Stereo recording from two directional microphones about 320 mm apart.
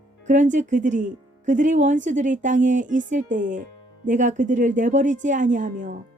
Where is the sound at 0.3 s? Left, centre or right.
Right.